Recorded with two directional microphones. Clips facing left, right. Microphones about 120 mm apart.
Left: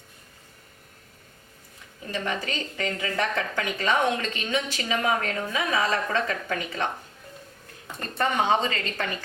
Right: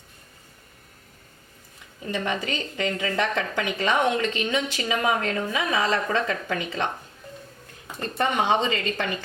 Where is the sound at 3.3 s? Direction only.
20° right (ahead or behind).